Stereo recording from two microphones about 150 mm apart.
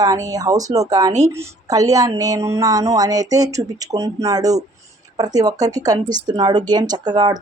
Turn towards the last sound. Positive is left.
turn(degrees=-25)  # may be behind; listen again after turning